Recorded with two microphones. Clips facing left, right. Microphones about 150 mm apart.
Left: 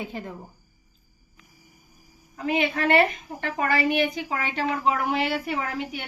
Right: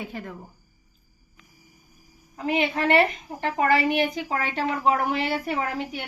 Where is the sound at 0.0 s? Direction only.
20° left (ahead or behind).